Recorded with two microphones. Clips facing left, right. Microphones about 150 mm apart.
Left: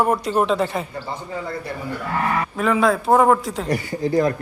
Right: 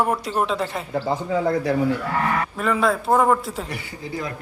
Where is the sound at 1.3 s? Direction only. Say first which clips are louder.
Right 8 dB; 90° right.